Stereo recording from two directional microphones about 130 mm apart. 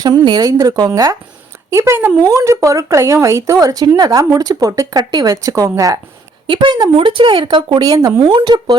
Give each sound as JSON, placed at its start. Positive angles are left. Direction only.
{"t": 0.3, "sound": "speech", "side_deg": -30}
{"t": 1.7, "sound": "speech", "side_deg": -20}
{"t": 6.5, "sound": "speech", "side_deg": -35}